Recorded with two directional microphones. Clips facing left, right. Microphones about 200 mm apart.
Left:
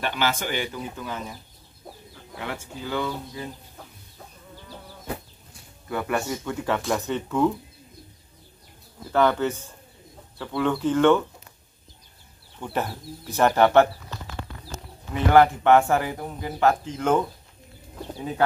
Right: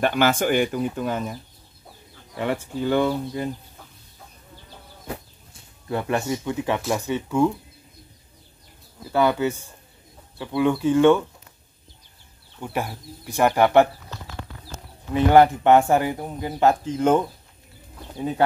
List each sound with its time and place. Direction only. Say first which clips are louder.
0.0 s speech: right 7 dB; 50° right (ahead or behind)
2.3 s speech: right 8 dB; 60° right (ahead or behind)
5.9 s speech: right 2 dB; 25° right (ahead or behind); by 7.5 s 10° right (ahead or behind)
9.1 s speech: right 1 dB; 10° right (ahead or behind)
12.5 s speech: even; 10° right (ahead or behind)
15.3 s speech: right 1 dB; 20° right (ahead or behind)